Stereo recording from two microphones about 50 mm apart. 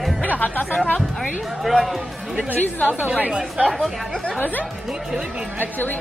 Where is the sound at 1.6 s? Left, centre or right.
Centre.